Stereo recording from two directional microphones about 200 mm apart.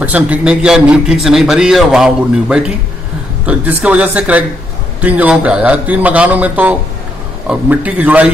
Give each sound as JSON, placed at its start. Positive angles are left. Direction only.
{"t": 0.0, "sound": "a man's voice", "side_deg": -5}